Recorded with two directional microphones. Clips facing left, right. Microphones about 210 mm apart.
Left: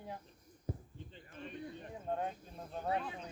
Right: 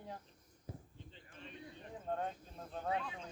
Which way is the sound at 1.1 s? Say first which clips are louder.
Left 7 dB; 50° left (ahead or behind).